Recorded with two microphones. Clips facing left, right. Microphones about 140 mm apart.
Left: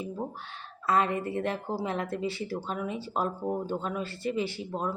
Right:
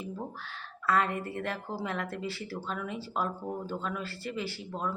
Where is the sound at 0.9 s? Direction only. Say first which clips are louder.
Left 2 dB; 20° left (ahead or behind).